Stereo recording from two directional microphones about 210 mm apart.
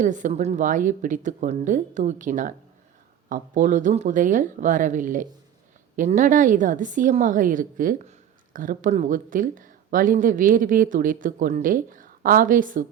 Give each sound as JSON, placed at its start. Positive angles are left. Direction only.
{"t": 0.0, "sound": "speech", "side_deg": -35}